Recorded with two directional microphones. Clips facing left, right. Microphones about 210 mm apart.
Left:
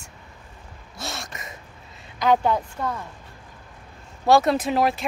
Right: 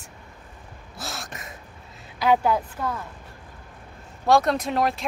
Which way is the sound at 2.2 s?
5° right (ahead or behind).